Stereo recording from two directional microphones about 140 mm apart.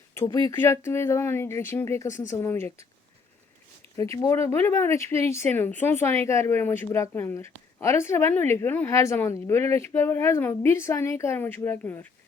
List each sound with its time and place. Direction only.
0.3 s speech: 20° left (ahead or behind)
3.9 s speech: 20° left (ahead or behind)